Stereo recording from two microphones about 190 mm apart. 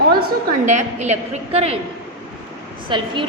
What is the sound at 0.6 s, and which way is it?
A woman's voice, 40° right (ahead or behind).